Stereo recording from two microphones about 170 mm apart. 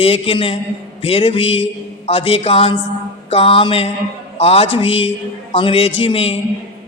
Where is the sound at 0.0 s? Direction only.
35° left (ahead or behind).